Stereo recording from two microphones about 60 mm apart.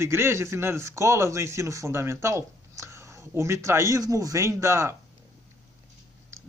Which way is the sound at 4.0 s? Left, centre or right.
Right.